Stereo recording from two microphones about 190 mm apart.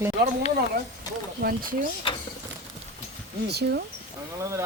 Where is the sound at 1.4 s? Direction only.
50° right (ahead or behind).